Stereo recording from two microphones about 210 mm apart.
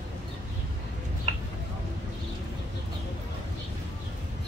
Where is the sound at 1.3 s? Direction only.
25° right (ahead or behind).